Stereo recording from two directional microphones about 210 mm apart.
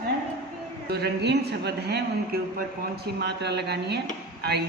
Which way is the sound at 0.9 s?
50° right (ahead or behind).